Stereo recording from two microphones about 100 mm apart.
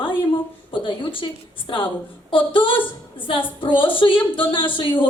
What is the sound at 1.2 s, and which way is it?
Speech, 45° left (ahead or behind).